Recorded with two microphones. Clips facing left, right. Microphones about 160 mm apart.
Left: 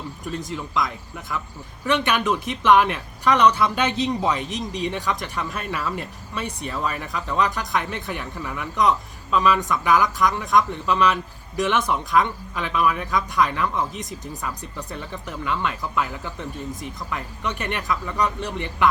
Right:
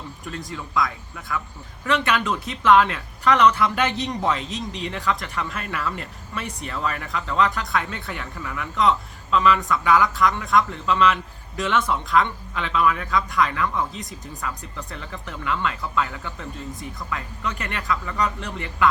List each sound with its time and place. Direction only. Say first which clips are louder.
0.3 s speech: left 4 dB; 20° left (ahead or behind)